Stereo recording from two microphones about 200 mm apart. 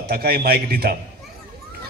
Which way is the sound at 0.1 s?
50° right (ahead or behind).